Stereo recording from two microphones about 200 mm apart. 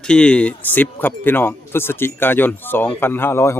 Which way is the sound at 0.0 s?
5° left (ahead or behind).